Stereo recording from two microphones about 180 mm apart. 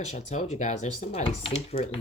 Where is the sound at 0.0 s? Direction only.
40° left (ahead or behind).